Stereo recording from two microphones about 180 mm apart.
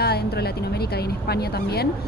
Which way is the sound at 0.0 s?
60° left (ahead or behind).